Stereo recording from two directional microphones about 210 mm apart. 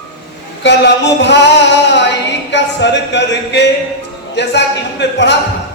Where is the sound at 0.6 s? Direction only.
55° left (ahead or behind).